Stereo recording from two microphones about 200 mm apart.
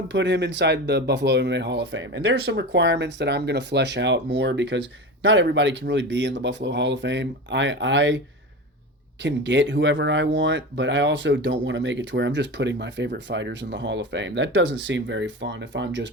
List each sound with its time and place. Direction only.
0.1 s speech: 60° right (ahead or behind)
9.2 s speech: 60° right (ahead or behind)